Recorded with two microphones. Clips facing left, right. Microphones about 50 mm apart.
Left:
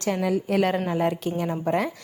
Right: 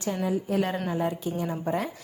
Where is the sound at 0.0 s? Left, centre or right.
Left.